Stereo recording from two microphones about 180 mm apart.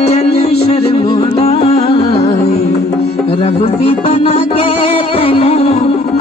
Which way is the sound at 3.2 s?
30° left (ahead or behind).